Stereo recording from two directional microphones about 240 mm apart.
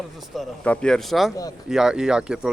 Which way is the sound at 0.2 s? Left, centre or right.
Centre.